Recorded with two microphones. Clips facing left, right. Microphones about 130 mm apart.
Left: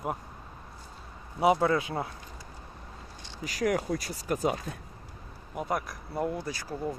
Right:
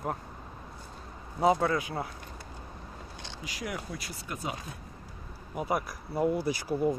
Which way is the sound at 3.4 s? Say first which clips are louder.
Left 10 dB; 45° left (ahead or behind).